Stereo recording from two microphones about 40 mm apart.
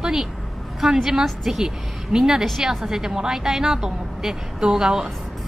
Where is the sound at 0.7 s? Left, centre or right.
Centre.